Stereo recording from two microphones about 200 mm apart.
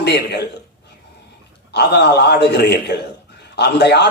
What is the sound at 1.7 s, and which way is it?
A man's voice, 55° left (ahead or behind).